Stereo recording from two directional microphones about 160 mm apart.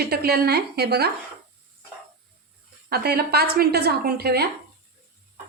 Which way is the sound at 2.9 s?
75° right (ahead or behind).